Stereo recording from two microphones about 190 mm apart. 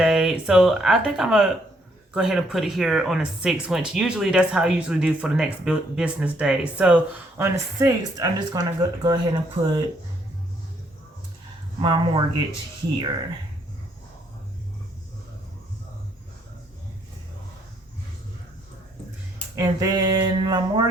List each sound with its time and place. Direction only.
0.0 s speech: centre (ahead or behind); by 9.4 s 20° right (ahead or behind)
11.8 s speech: 25° right (ahead or behind)
19.5 s speech: 20° right (ahead or behind)